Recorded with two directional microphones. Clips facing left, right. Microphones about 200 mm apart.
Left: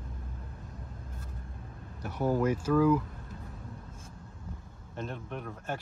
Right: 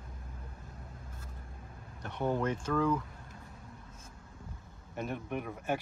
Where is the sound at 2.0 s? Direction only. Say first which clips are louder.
Left 4 dB; 5° left (ahead or behind).